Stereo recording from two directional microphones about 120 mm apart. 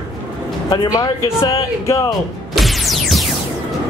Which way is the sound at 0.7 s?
30° left (ahead or behind).